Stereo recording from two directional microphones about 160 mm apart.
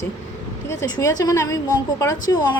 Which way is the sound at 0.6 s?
20° left (ahead or behind).